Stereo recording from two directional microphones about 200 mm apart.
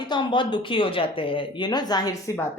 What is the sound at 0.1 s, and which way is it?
A woman's voice, 25° left (ahead or behind).